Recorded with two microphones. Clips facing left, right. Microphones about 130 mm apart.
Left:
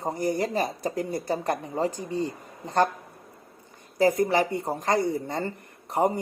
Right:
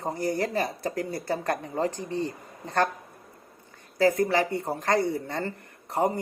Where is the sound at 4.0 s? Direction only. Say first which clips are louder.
Left 1 dB; 15° left (ahead or behind).